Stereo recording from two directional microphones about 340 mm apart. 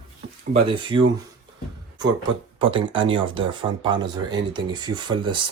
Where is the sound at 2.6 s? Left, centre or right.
Centre.